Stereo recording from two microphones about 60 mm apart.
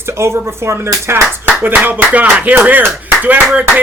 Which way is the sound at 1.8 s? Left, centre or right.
Right.